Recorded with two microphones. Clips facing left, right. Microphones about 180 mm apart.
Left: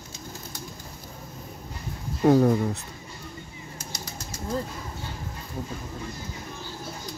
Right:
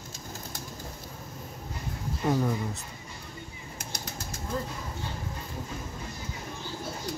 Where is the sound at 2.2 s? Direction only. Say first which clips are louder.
Left 9 dB; 60° left (ahead or behind).